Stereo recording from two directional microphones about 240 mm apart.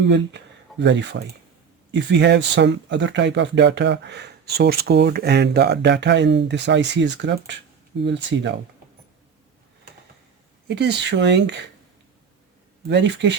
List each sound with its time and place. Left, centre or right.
0.0 s speech: right
10.7 s speech: right
12.9 s speech: right